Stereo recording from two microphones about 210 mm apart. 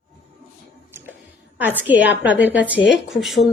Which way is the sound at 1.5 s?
10° right (ahead or behind).